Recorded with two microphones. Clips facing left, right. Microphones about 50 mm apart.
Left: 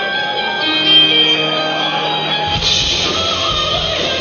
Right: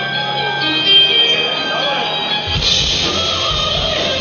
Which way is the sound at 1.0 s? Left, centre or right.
Centre.